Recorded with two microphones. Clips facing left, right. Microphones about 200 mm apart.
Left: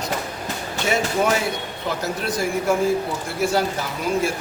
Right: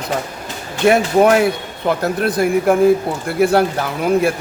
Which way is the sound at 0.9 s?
60° right (ahead or behind).